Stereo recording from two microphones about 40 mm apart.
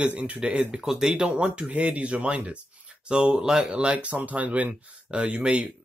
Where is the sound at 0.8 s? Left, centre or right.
Centre.